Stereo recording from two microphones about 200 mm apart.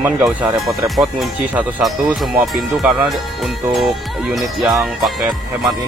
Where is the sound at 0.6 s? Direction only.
Centre (ahead or behind).